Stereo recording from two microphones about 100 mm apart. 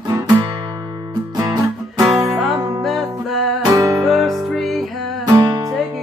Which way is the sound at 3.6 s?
35° right (ahead or behind).